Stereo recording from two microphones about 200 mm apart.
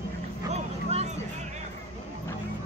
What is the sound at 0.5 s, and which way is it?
Vehicle, 35° right (ahead or behind).